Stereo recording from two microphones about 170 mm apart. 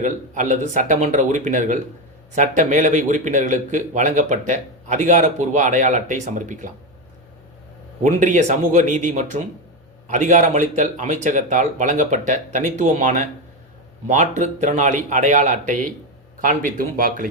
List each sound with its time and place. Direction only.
0.0 s a man's voice: 45° right (ahead or behind)
8.0 s a man's voice: 45° right (ahead or behind)